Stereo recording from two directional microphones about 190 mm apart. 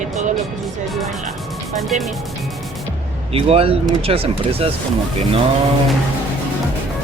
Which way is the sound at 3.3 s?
30° right (ahead or behind).